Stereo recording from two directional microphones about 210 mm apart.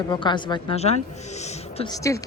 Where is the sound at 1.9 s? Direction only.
15° left (ahead or behind).